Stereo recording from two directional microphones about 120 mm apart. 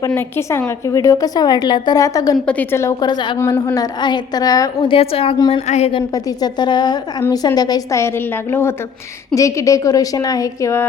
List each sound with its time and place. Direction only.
0.1 s a woman's voice: 20° left (ahead or behind)
2.5 s a woman's voice: 20° left (ahead or behind)
3.0 s a woman's voice: 35° left (ahead or behind)
3.3 s a woman's voice: 20° left (ahead or behind)
3.8 s a woman's voice: 35° left (ahead or behind)
4.8 s a woman's voice: 50° left (ahead or behind)
5.6 s a woman's voice: 75° left (ahead or behind)
6.1 s a woman's voice: 30° left (ahead or behind)